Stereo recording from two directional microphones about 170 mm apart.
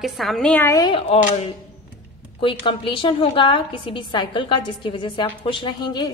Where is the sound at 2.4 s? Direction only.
30° left (ahead or behind).